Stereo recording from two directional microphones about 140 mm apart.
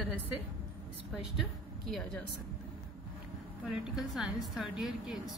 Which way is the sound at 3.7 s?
Centre (ahead or behind).